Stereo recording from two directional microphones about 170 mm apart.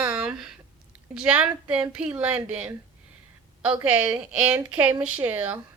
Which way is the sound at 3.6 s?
10° right (ahead or behind).